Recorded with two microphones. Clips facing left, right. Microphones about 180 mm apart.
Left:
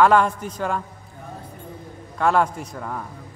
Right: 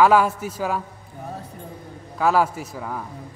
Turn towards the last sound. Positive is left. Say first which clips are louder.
# even
turn(degrees=-5)  # may be behind; listen again after turning